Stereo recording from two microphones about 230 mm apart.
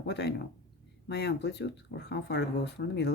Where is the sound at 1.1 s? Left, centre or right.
Left.